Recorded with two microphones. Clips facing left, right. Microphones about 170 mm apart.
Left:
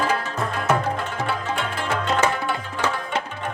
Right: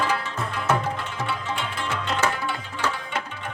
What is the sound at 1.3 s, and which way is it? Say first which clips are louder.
Music: left 3 dB; 45° left (ahead or behind).